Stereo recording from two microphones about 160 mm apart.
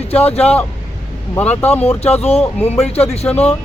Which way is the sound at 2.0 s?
40° left (ahead or behind).